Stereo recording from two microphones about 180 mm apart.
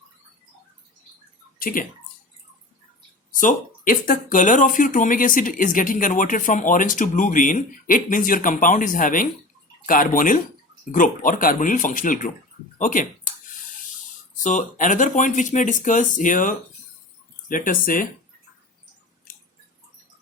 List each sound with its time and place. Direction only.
1.5 s speech: 50° left (ahead or behind)
3.4 s speech: 50° left (ahead or behind)
14.4 s speech: 45° left (ahead or behind)
19.3 s chewing: 50° left (ahead or behind)